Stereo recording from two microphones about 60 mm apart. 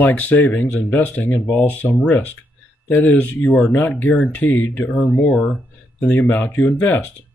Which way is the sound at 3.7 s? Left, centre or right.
Left.